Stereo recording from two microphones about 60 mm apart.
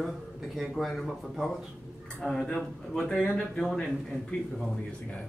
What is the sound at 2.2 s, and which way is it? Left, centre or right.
Speech, centre.